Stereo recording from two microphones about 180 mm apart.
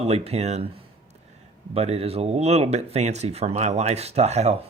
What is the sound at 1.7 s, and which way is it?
Speech, 35° right (ahead or behind).